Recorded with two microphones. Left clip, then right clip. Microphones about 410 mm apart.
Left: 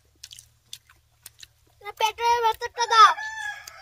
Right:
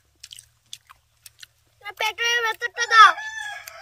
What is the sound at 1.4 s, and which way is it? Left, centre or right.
Speech, centre.